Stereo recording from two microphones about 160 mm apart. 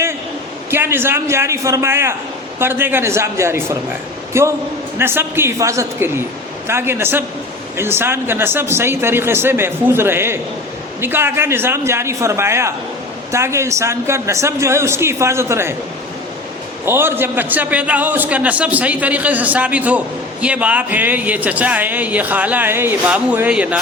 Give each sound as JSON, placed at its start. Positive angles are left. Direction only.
{"t": 0.7, "sound": "speech", "side_deg": -15}
{"t": 16.8, "sound": "speech", "side_deg": -15}